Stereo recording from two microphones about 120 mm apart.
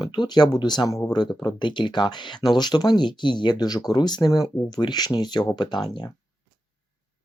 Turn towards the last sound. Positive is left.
turn(degrees=35)  # may be behind; listen again after turning